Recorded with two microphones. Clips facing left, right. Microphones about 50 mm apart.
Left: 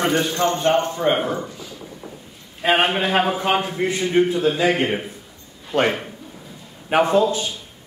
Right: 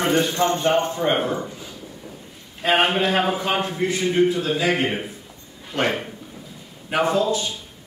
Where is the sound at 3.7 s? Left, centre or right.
Left.